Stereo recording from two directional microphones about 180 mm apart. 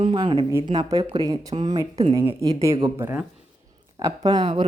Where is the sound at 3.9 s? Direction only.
20° right (ahead or behind).